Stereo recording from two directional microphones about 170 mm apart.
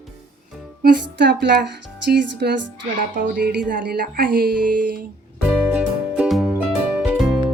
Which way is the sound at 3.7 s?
55° right (ahead or behind).